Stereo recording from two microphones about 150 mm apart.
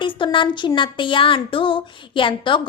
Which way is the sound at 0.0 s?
35° left (ahead or behind).